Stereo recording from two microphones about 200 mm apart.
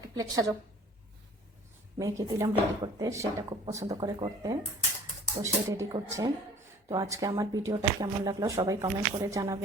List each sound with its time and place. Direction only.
0.2 s speech: 15° right (ahead or behind)
2.0 s speech: 15° right (ahead or behind)